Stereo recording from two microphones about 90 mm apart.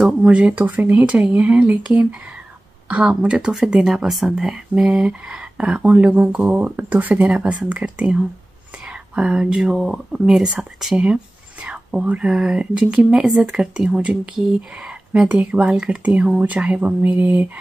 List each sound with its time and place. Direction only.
0.0 s speech: 10° right (ahead or behind)
2.9 s speech: 10° right (ahead or behind)